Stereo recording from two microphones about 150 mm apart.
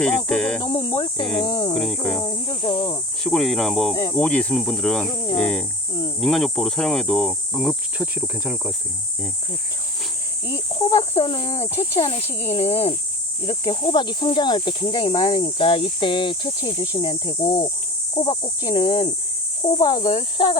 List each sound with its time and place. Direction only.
0.3 s cricket: 5° left (ahead or behind)
0.6 s speech: 25° left (ahead or behind)
1.7 s cricket: 5° left (ahead or behind)
2.2 s speech: 35° left (ahead or behind)
3.2 s cricket: centre (ahead or behind)
10.5 s speech: 30° left (ahead or behind)